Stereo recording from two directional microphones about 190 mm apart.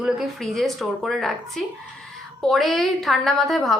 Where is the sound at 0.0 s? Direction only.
Centre (ahead or behind).